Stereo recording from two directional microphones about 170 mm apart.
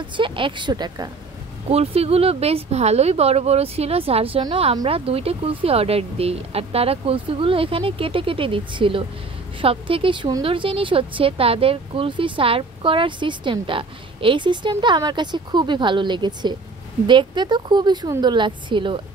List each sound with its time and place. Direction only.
0.0 s a woman's voice: 30° right (ahead or behind)
1.7 s a woman's voice: 35° right (ahead or behind)